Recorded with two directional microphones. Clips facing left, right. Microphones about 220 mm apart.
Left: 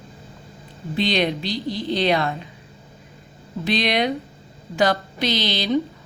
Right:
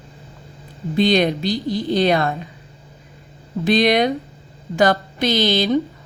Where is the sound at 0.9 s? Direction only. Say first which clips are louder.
Right 5 dB; 45° right (ahead or behind).